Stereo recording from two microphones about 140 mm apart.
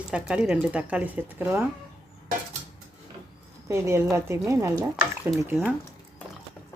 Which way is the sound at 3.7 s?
20° right (ahead or behind).